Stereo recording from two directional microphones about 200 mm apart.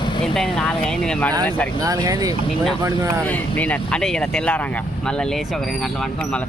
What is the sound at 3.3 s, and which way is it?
Speech, 5° left (ahead or behind).